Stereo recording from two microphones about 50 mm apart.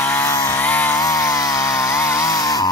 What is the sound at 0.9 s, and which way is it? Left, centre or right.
Chainsaw, left.